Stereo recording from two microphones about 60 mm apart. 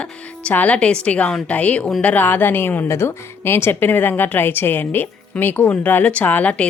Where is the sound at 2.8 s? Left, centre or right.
Left.